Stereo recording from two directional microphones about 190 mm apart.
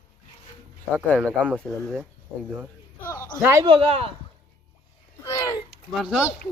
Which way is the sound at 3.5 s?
20° right (ahead or behind).